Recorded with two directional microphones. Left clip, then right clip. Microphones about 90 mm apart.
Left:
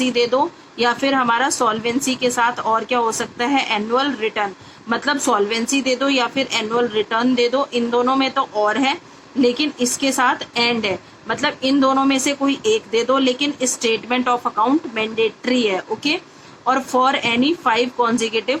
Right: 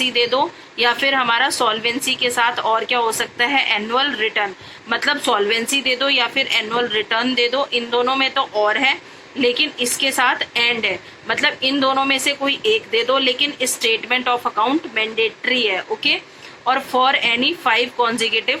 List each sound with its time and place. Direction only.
0.0 s speech: 15° right (ahead or behind)